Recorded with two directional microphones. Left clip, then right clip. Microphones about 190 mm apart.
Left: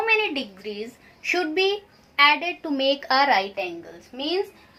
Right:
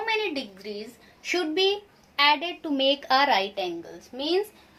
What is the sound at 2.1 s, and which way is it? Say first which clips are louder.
Speech: left 3 dB; centre (ahead or behind).